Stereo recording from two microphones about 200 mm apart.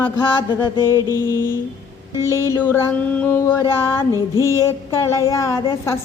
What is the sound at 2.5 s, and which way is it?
A woman's voice, 10° left (ahead or behind).